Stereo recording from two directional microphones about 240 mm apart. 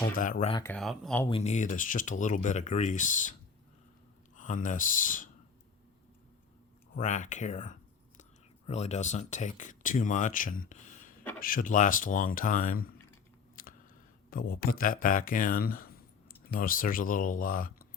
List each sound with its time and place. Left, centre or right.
0.1 s speech: left
0.5 s speech: centre
1.2 s speech: left
4.4 s speech: left
6.9 s speech: left
13.6 s chewing: left
14.3 s speech: left